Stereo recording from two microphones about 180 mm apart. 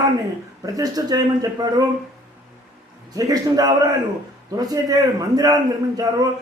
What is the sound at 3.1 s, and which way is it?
Speech, 20° right (ahead or behind).